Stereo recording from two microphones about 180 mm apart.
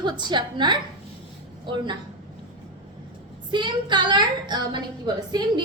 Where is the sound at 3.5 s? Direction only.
25° right (ahead or behind).